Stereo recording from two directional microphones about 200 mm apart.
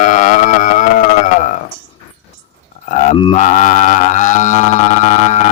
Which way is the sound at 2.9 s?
35° left (ahead or behind).